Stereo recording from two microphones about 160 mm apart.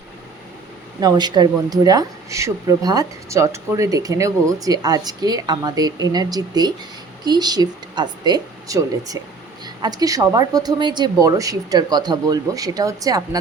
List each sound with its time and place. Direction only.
0.9 s speech: 25° right (ahead or behind)